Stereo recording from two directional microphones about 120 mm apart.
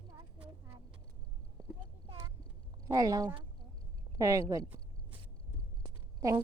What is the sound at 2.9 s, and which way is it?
Speech, 30° right (ahead or behind).